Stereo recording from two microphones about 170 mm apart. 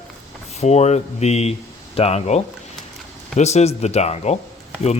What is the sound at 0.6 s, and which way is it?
A man's voice, 40° left (ahead or behind).